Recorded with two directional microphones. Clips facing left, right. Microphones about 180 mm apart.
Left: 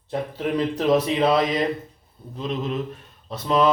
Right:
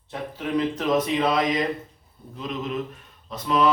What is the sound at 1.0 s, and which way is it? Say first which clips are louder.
Mantra: left 3 dB; 30° left (ahead or behind).